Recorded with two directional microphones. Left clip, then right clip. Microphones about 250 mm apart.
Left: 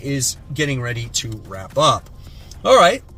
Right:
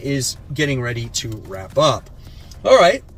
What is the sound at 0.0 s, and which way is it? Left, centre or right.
Speech, centre.